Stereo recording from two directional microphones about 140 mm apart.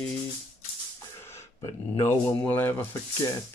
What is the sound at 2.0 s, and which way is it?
Speech, 15° left (ahead or behind).